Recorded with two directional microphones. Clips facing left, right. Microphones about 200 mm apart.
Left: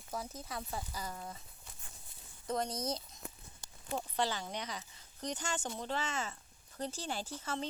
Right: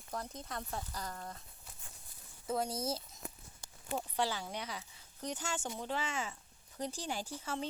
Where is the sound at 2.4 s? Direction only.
5° right (ahead or behind).